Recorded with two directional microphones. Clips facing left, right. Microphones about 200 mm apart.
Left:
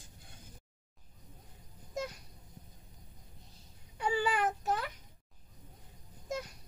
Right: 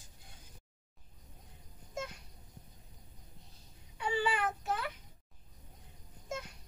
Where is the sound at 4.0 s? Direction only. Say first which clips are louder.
Left 2 dB; 40° left (ahead or behind).